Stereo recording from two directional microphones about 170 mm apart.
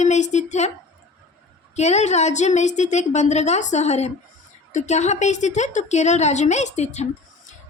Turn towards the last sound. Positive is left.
turn(degrees=40)  # may be behind; listen again after turning